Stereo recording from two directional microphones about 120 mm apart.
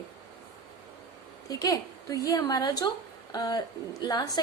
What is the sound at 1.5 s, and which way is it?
A woman's voice, 30° left (ahead or behind).